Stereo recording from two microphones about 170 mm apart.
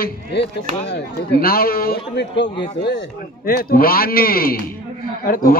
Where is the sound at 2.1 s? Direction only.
90° left.